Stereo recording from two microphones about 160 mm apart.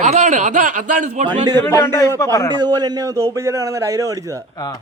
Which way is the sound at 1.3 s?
25° right (ahead or behind).